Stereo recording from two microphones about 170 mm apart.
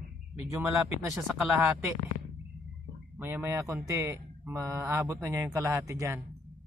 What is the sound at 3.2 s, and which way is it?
Speech, 10° right (ahead or behind).